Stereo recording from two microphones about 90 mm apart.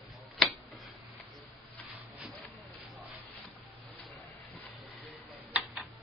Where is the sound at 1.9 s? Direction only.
20° right (ahead or behind).